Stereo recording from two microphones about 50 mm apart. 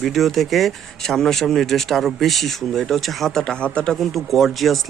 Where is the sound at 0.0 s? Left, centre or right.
Centre.